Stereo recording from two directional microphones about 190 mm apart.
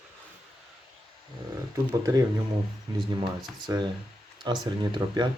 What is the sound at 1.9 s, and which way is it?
Speech, 20° right (ahead or behind).